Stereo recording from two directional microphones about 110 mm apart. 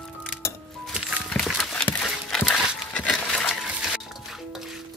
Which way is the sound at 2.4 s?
15° left (ahead or behind).